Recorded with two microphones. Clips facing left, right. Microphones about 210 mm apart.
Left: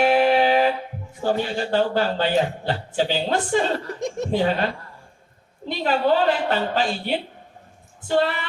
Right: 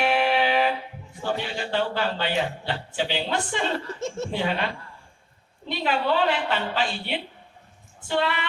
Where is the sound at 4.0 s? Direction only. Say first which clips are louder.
Left 3 dB; 15° left (ahead or behind).